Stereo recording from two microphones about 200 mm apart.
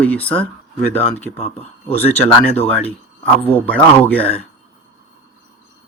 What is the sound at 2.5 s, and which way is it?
Speech, 10° left (ahead or behind).